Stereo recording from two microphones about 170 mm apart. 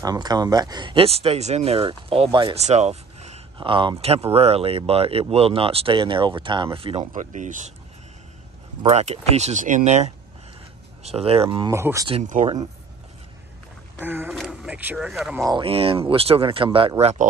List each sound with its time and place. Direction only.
0.0 s speech: 25° right (ahead or behind)
2.6 s a sound: 40° right (ahead or behind)
4.0 s speech: 35° right (ahead or behind)
8.8 s speech: 40° right (ahead or behind)
11.7 s speech: 15° right (ahead or behind)
12.1 s speech: 45° right (ahead or behind)
14.0 s speech: 10° right (ahead or behind)
14.3 s a sound: centre (ahead or behind)
15.0 s speech: centre (ahead or behind)
15.3 s speech: 20° right (ahead or behind)
15.6 s speech: 35° right (ahead or behind)